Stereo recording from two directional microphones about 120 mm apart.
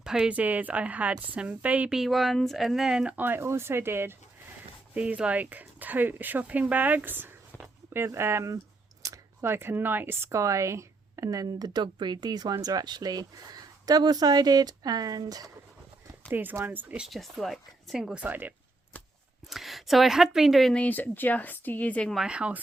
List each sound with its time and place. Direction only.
0.0 s speech: 5° right (ahead or behind)
2.0 s speech: centre (ahead or behind); by 4.1 s 20° right (ahead or behind)
4.9 s speech: 10° right (ahead or behind); by 15.4 s 30° right (ahead or behind)
16.3 s speech: 15° right (ahead or behind)
17.1 s speech: centre (ahead or behind)
19.5 s speech: centre (ahead or behind)
22.2 s speech: 10° right (ahead or behind)